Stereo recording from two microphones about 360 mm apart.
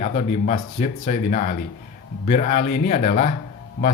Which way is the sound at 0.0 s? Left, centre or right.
Centre.